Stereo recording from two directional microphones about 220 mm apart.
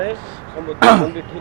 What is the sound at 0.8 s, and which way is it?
Speech, 20° right (ahead or behind).